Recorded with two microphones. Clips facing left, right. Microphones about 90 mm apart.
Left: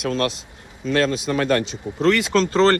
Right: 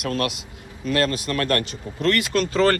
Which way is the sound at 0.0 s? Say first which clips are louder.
Left 2 dB; 55° right (ahead or behind).